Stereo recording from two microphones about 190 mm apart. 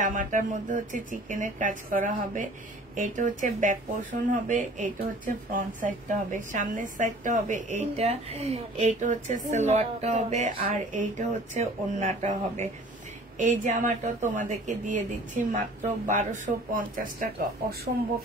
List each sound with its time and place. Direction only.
0.0 s speech: 40° right (ahead or behind)